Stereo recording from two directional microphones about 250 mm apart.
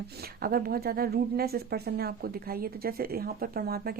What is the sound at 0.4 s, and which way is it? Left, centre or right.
A woman's voice, right.